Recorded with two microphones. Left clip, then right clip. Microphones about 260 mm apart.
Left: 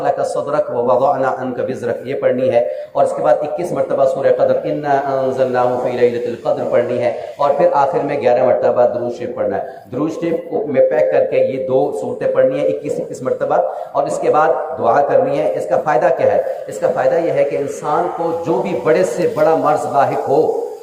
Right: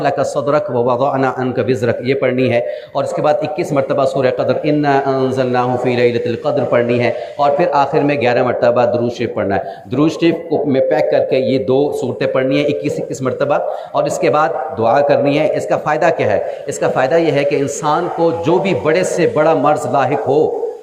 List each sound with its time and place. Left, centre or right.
0.0 s speech: right
10.2 s speech: right